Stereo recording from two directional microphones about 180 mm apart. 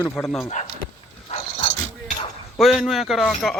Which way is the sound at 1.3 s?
35° left (ahead or behind).